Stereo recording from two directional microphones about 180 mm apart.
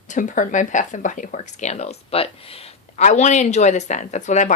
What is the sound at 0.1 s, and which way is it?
Speech, 45° left (ahead or behind).